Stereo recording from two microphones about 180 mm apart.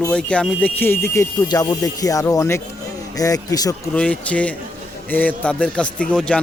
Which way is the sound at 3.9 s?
5° left (ahead or behind).